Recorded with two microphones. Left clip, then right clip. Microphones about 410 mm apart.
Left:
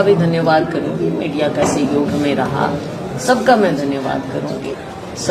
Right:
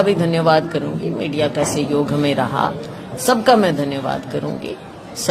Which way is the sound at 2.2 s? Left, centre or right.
Right.